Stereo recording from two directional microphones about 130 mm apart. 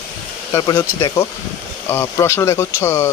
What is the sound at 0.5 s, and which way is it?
Speech, 30° left (ahead or behind).